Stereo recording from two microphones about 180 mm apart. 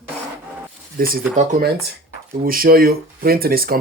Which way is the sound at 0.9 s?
55° right (ahead or behind).